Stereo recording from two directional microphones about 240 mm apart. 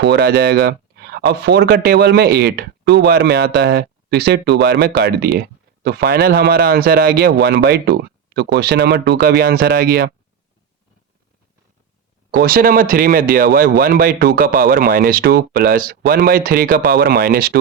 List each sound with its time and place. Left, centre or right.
0.0 s speech: right
12.4 s a man's voice: right